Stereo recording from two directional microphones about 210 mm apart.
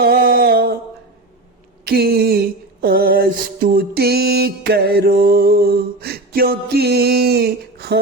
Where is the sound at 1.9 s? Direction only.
50° right (ahead or behind).